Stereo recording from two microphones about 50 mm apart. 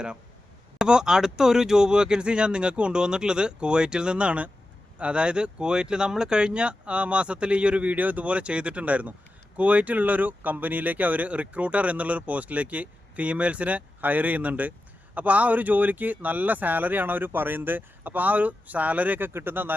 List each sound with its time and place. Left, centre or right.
0.8 s speech: centre; by 19.3 s right
19.3 s speech: right